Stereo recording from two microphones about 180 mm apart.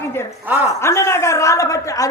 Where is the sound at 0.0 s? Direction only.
15° left (ahead or behind).